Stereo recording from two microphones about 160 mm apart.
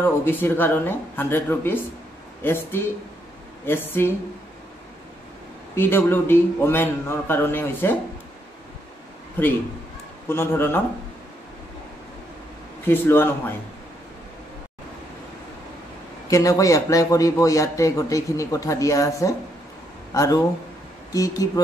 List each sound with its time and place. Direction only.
0.0 s a man's voice: 10° left (ahead or behind)
5.8 s a man's voice: 15° left (ahead or behind)
10.2 s a man's voice: 15° left (ahead or behind)
12.8 s a man's voice: 15° left (ahead or behind)
16.3 s a man's voice: 20° left (ahead or behind)